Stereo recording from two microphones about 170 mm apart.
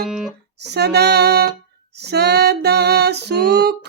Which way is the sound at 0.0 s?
Centre (ahead or behind).